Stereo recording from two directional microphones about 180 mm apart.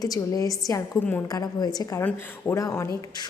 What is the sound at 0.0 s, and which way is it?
Speech, 20° left (ahead or behind).